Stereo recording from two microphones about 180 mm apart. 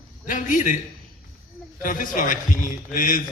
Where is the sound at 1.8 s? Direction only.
50° left (ahead or behind).